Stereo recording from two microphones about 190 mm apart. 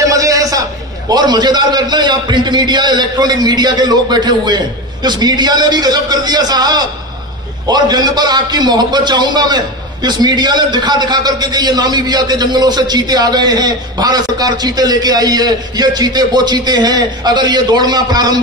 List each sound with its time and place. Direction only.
0.0 s a man's voice: 15° right (ahead or behind)